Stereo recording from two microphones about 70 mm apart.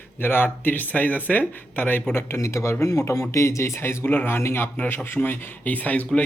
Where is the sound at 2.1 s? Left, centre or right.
Left.